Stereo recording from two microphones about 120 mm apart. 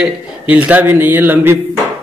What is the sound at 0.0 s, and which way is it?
A man's voice, 15° right (ahead or behind).